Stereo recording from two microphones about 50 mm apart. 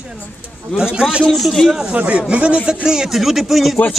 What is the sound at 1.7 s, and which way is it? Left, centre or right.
Speech, centre.